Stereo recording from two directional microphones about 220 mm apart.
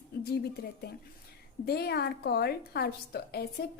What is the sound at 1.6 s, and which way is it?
A woman's voice, 45° left (ahead or behind).